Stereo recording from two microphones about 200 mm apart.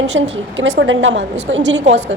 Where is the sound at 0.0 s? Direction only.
65° right (ahead or behind).